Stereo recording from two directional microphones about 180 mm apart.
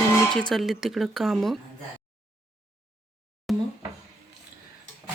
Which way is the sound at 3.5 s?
Centre (ahead or behind).